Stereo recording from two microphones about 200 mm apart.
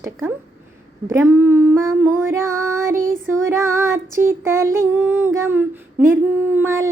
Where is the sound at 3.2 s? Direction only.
15° right (ahead or behind).